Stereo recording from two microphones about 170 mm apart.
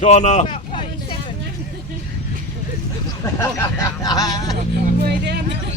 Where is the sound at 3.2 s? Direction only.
15° left (ahead or behind).